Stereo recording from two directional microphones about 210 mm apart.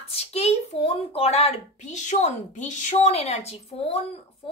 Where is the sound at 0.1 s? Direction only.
30° left (ahead or behind).